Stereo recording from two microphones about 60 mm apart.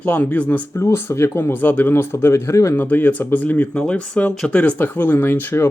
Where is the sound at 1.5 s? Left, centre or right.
Left.